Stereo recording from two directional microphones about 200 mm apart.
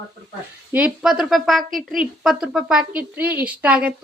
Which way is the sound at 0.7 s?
5° right (ahead or behind).